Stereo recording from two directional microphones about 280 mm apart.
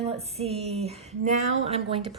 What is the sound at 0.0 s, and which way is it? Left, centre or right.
Speech, right.